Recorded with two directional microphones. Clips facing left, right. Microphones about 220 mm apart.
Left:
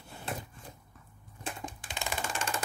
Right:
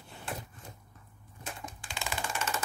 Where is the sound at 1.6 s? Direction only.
20° left (ahead or behind).